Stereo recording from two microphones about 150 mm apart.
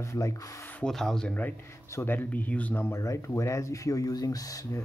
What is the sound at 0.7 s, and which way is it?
Speech, 5° left (ahead or behind).